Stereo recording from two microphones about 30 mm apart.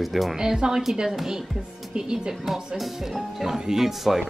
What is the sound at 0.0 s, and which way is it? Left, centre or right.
Speech, centre.